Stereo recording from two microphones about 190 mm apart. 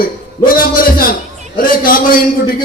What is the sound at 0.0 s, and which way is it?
A man's voice, 50° left (ahead or behind).